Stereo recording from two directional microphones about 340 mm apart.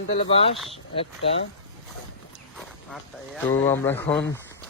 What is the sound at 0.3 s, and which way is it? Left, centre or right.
Speech, centre.